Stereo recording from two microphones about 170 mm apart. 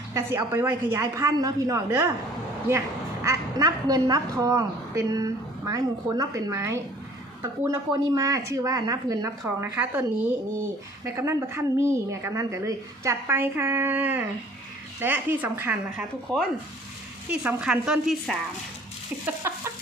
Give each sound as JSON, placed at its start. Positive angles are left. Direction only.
{"t": 0.1, "sound": "speech", "side_deg": -15}
{"t": 3.2, "sound": "a woman's voice", "side_deg": -20}
{"t": 16.3, "sound": "a woman's voice", "side_deg": 5}
{"t": 19.2, "sound": "a sound", "side_deg": -15}